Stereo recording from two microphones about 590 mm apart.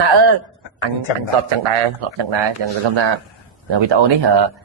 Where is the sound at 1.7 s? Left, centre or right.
Right.